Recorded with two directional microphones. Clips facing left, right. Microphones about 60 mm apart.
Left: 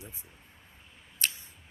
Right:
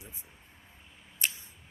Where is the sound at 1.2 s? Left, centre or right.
Centre.